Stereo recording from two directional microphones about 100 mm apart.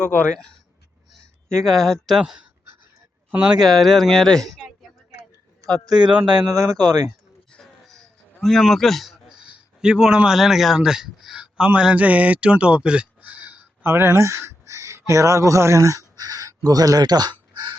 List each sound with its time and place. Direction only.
0.0 s speech: 15° left (ahead or behind); by 3.7 s 10° right (ahead or behind)
3.7 s speech: centre (ahead or behind)
5.7 s speech: 40° right (ahead or behind)
7.5 s a sound: 5° left (ahead or behind); by 17.7 s 45° right (ahead or behind)